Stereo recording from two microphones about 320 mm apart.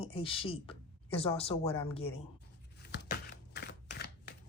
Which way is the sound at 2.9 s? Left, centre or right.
Left.